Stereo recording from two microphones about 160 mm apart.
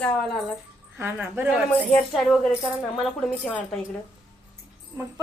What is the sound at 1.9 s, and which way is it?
Speech, centre (ahead or behind).